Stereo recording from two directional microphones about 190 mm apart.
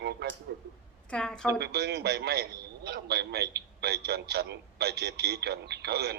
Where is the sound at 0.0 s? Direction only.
60° right (ahead or behind).